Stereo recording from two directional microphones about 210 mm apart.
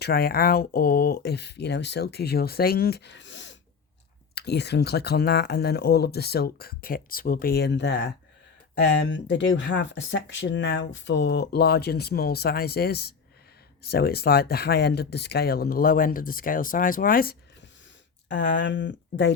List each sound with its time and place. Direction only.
0.0 s speech: 45° left (ahead or behind)
18.3 s speech: 60° left (ahead or behind)